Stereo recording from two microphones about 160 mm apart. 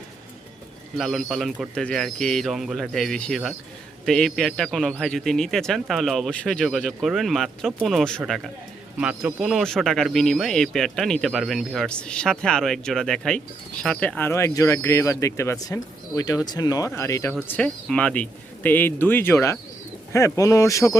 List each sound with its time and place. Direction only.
0.9 s speech: centre (ahead or behind); by 17.3 s 20° left (ahead or behind)
17.5 s speech: 5° left (ahead or behind)